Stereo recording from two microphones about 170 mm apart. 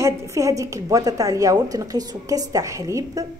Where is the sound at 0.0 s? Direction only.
15° right (ahead or behind).